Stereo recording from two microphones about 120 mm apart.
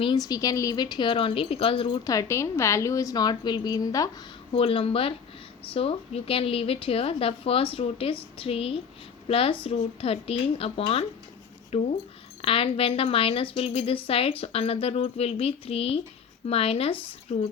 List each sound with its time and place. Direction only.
0.0 s a woman's voice: 35° left (ahead or behind)
2.0 s a woman's voice: 25° left (ahead or behind)
4.5 s a woman's voice: 50° left (ahead or behind)
17.3 s a woman's voice: 65° left (ahead or behind)